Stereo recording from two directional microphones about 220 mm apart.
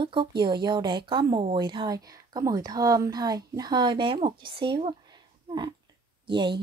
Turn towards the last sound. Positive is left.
turn(degrees=-20)  # may be behind; listen again after turning